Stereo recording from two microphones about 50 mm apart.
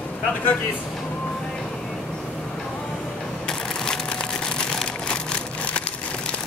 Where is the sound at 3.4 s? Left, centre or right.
Centre.